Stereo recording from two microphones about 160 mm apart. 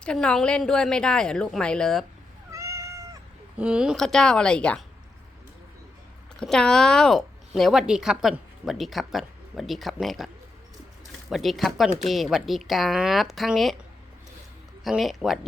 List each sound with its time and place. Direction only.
0.0 s speech: 5° left (ahead or behind)
2.5 s cat: 20° right (ahead or behind)
3.6 s speech: 5° right (ahead or behind)
6.4 s speech: 5° left (ahead or behind)
11.3 s speech: centre (ahead or behind)
14.8 s speech: centre (ahead or behind)